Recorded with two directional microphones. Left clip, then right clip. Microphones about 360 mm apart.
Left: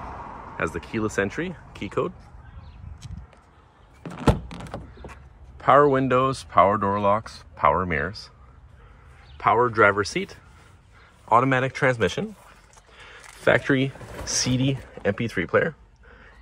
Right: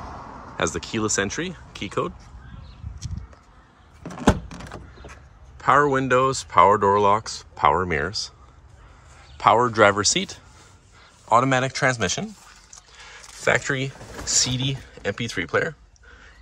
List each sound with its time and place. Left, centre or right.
0.0 s a sound: left
0.6 s speech: centre
5.6 s speech: centre
9.4 s speech: centre